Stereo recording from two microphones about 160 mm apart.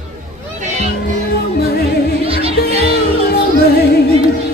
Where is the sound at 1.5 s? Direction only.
85° left.